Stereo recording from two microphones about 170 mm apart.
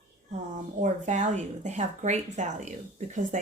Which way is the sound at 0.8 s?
45° right (ahead or behind).